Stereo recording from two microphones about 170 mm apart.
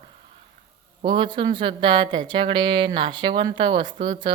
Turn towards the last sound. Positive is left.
turn(degrees=-30)  # may be behind; listen again after turning